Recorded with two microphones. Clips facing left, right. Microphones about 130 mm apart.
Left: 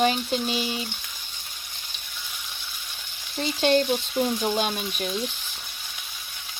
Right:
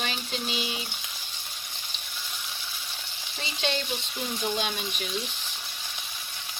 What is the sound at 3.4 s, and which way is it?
Frying, 50° left (ahead or behind).